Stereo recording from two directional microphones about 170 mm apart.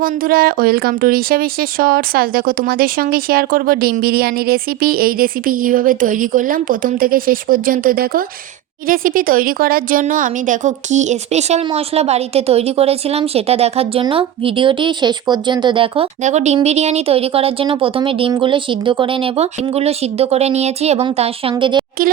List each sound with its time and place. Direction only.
0.0 s a woman's voice: 60° right (ahead or behind); by 16.0 s 30° right (ahead or behind)
16.2 s a woman's voice: 40° right (ahead or behind); by 21.8 s 25° right (ahead or behind)